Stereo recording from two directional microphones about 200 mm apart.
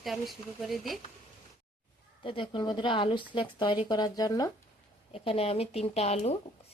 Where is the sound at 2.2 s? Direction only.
25° left (ahead or behind).